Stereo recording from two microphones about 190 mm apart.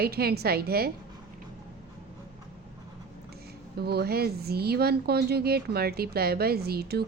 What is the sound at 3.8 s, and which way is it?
Speech, 55° right (ahead or behind).